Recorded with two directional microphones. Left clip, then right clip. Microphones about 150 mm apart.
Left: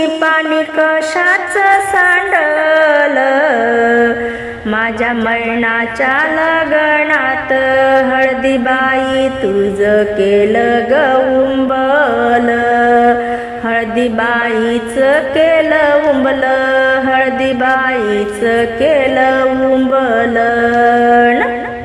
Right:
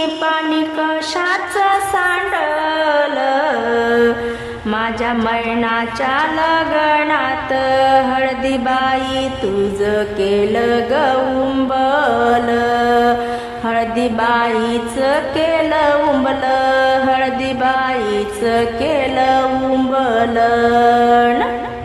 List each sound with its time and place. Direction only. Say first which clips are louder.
2.3 s music: left 6 dB; 15° left (ahead or behind)
6.1 s music: left 3 dB; 10° left (ahead or behind)
11.8 s music: left 2 dB; 5° left (ahead or behind)
13.7 s music: left 3 dB; centre (ahead or behind)
21.0 s music: left 3 dB; 20° left (ahead or behind)